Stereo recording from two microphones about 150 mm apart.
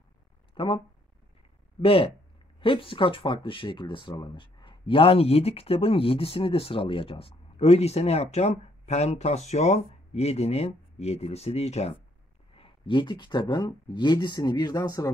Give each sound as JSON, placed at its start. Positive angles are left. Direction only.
{"t": 0.6, "sound": "speech", "side_deg": 30}
{"t": 1.8, "sound": "speech", "side_deg": 35}
{"t": 12.5, "sound": "speech", "side_deg": 35}